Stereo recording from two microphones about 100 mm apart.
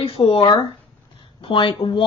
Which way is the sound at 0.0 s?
70° left (ahead or behind).